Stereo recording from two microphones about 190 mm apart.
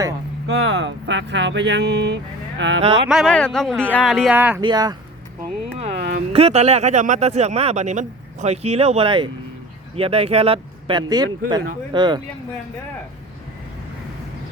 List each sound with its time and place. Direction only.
0.4 s speech: 65° right (ahead or behind)
2.8 s speech: 30° right (ahead or behind)
3.1 s speech: centre (ahead or behind)
4.4 s speech: 10° right (ahead or behind)
4.6 s speech: 20° right (ahead or behind)
5.8 s a sound: 40° right (ahead or behind)
6.3 s speech: 35° right (ahead or behind)